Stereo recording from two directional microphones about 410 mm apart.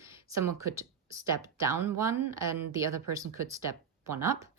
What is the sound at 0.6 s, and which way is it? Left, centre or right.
Speech, centre.